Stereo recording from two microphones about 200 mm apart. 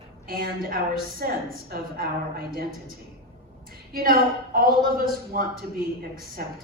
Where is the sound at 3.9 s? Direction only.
45° right (ahead or behind).